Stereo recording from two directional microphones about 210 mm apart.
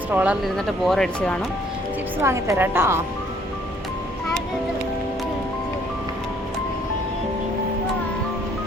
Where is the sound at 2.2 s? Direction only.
15° right (ahead or behind).